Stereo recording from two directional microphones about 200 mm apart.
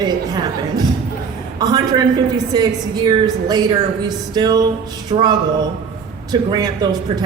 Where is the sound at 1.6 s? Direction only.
20° right (ahead or behind).